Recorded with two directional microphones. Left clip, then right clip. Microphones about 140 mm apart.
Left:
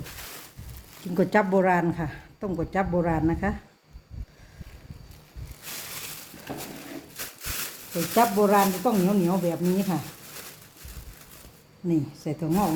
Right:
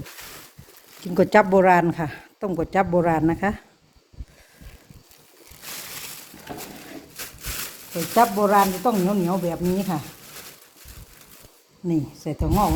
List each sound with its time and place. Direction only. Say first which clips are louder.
1.0 s speech: right 6 dB; 65° right (ahead or behind); by 3.5 s 90° right
7.2 s a sound: right 2 dB; centre (ahead or behind)
8.1 s speech: right 3 dB; 40° right (ahead or behind)
11.9 s speech: right 2 dB; 50° right (ahead or behind)